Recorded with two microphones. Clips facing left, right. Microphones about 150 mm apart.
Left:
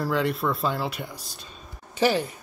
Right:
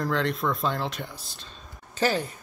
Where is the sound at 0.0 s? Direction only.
10° left (ahead or behind).